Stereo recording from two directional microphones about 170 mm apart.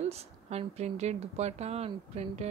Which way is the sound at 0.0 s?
40° right (ahead or behind).